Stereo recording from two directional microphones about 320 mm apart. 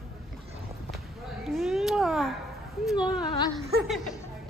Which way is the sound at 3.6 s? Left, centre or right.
Centre.